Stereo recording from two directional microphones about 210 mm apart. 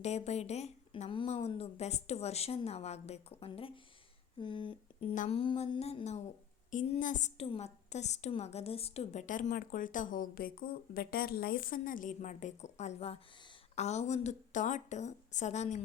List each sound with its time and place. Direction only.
0.0 s a woman's voice: 30° left (ahead or behind)